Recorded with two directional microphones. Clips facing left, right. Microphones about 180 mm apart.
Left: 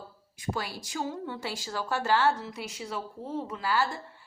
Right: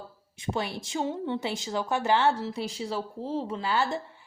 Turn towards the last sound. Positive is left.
turn(degrees=-20)  # may be behind; listen again after turning